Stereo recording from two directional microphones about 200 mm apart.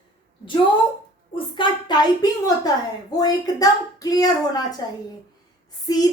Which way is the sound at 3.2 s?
20° left (ahead or behind).